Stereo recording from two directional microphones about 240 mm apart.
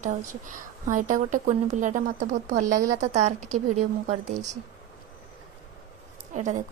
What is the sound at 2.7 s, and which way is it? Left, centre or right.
Speech, centre.